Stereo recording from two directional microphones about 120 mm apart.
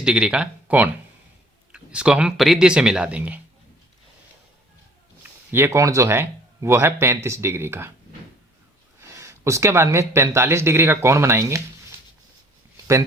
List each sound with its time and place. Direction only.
0.0 s speech: 10° right (ahead or behind)
5.2 s speech: 15° right (ahead or behind)
9.0 s speech: 25° right (ahead or behind)